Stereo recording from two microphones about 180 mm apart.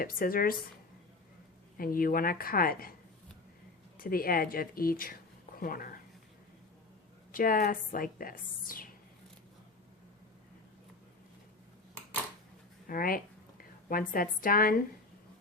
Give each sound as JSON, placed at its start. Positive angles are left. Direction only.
{"t": 0.0, "sound": "a woman's voice", "side_deg": 50}
{"t": 1.8, "sound": "a woman's voice", "side_deg": 50}
{"t": 3.9, "sound": "a woman's voice", "side_deg": 55}
{"t": 7.3, "sound": "a woman's voice", "side_deg": 50}
{"t": 12.9, "sound": "a woman's voice", "side_deg": 50}